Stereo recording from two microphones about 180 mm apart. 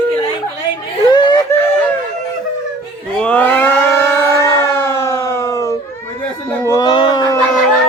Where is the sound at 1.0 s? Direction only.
25° left (ahead or behind).